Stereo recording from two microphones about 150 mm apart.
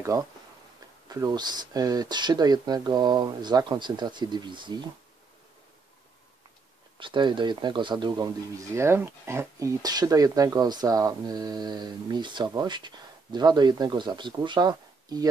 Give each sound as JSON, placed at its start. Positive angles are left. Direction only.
{"t": 0.0, "sound": "speech", "side_deg": -20}
{"t": 7.0, "sound": "speech", "side_deg": -30}